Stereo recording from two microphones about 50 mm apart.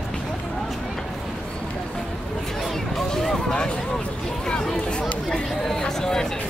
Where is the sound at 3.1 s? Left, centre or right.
Centre.